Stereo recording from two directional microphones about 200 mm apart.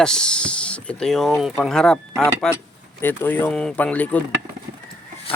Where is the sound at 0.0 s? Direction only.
5° left (ahead or behind).